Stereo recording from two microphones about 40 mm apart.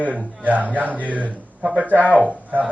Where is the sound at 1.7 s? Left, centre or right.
Right.